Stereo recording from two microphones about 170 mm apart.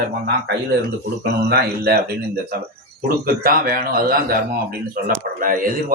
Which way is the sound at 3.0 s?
60° right (ahead or behind).